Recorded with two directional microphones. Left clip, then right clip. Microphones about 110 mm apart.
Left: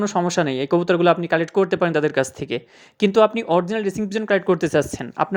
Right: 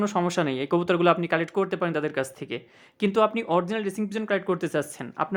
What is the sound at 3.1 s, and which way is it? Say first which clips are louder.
Speech: left 6 dB; 35° left (ahead or behind).